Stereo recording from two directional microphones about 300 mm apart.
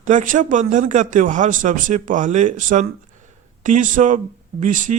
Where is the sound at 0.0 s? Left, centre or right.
Right.